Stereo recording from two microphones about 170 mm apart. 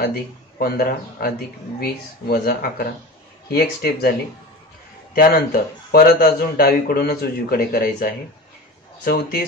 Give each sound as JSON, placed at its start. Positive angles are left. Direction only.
{"t": 0.0, "sound": "a man's voice", "side_deg": 65}
{"t": 5.1, "sound": "a man's voice", "side_deg": 60}